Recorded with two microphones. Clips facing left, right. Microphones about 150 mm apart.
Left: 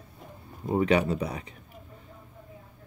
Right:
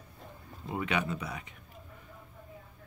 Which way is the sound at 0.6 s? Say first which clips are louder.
Left 9 dB; 35° left (ahead or behind).